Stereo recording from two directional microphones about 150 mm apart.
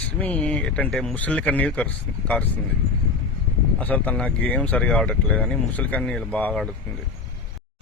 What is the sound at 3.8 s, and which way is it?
Speech, 10° left (ahead or behind).